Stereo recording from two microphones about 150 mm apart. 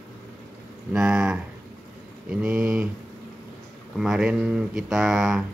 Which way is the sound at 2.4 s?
5° right (ahead or behind).